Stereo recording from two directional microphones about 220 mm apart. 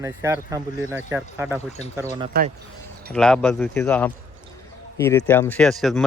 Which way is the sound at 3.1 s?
5° left (ahead or behind).